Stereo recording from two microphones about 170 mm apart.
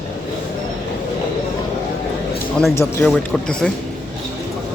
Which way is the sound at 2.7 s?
15° left (ahead or behind).